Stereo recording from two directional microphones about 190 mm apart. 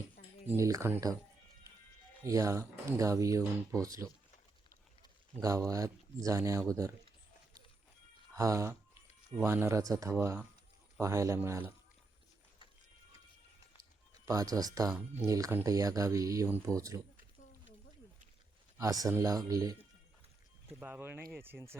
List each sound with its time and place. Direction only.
0.4 s speech: 15° right (ahead or behind)
2.2 s speech: 15° right (ahead or behind)
5.4 s speech: 15° right (ahead or behind)
8.4 s speech: 15° right (ahead or behind)
14.1 s speech: 20° right (ahead or behind)
18.8 s speech: 20° right (ahead or behind)
20.7 s speech: 10° right (ahead or behind)